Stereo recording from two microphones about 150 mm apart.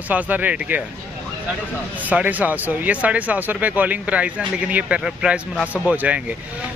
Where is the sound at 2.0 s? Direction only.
10° right (ahead or behind).